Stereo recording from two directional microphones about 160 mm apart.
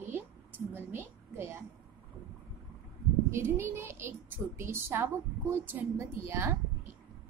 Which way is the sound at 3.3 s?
15° right (ahead or behind).